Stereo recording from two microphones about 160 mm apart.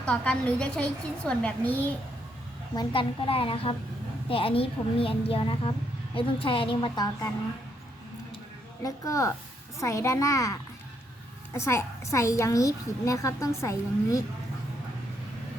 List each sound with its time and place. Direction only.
0.0 s a woman's voice: 5° left (ahead or behind)
2.7 s a woman's voice: 30° left (ahead or behind)
8.8 s a woman's voice: 20° left (ahead or behind)